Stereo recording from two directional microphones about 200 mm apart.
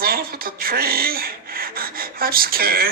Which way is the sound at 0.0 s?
50° right (ahead or behind).